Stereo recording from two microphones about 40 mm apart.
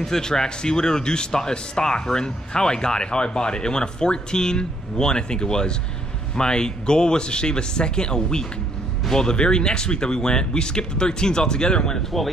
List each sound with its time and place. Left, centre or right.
0.0 s speech: centre